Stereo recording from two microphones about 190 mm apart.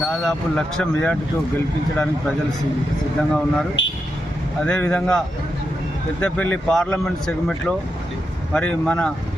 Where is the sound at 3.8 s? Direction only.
75° left (ahead or behind).